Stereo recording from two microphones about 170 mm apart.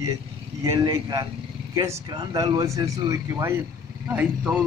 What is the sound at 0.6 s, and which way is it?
Speech, 20° right (ahead or behind).